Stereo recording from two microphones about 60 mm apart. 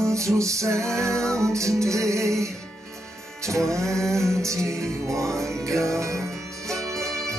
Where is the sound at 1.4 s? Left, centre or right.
Right.